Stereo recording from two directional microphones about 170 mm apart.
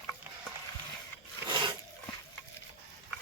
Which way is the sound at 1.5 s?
25° right (ahead or behind).